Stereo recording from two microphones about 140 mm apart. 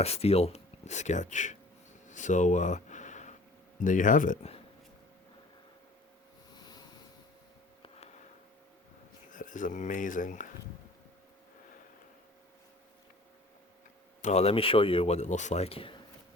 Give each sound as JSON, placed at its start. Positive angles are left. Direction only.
{"t": 0.0, "sound": "speech", "side_deg": 45}
{"t": 2.0, "sound": "a sound", "side_deg": 60}
{"t": 3.8, "sound": "speech", "side_deg": 65}
{"t": 9.3, "sound": "speech", "side_deg": 65}
{"t": 14.2, "sound": "a man's voice", "side_deg": 55}